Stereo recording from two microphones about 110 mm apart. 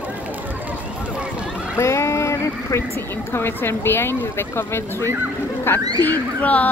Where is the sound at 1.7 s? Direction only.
25° left (ahead or behind).